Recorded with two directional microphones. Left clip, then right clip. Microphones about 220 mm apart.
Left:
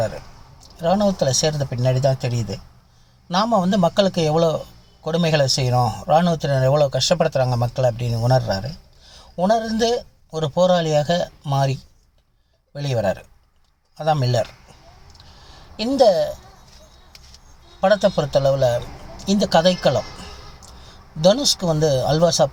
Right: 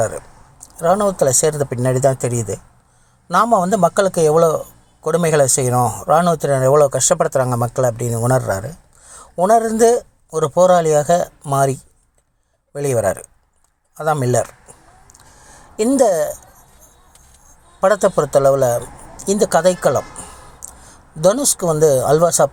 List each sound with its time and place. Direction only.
0.6 s speech: 40° right (ahead or behind)
3.2 s speech: 40° right (ahead or behind)
15.4 s speech: 40° right (ahead or behind)
17.7 s speech: 45° right (ahead or behind)
21.2 s speech: 40° right (ahead or behind)